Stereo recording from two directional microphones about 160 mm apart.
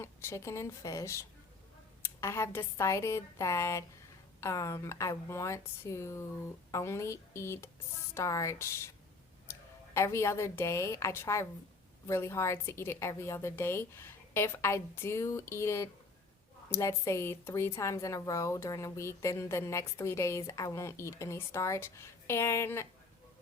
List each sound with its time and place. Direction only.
0.0 s a woman's voice: 15° left (ahead or behind)